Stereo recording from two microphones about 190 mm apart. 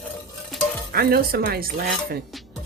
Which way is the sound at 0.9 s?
55° right (ahead or behind).